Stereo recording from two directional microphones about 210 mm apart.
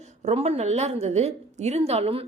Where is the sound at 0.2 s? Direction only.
30° right (ahead or behind).